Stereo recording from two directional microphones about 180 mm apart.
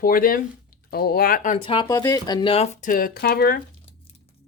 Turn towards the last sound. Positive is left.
turn(degrees=55)  # may be behind; listen again after turning